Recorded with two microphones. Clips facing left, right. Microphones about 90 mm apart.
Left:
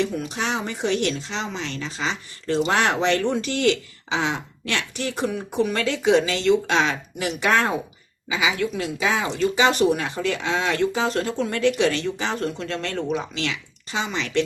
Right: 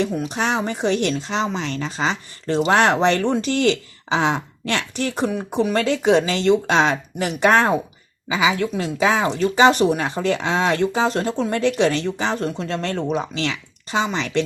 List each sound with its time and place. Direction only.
0.0 s speech: 40° right (ahead or behind)